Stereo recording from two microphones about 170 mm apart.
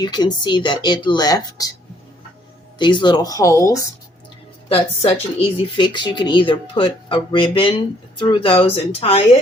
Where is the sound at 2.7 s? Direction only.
25° left (ahead or behind).